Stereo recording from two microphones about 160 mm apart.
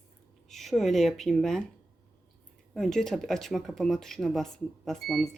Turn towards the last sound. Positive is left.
turn(degrees=0)  # may be behind; listen again after turning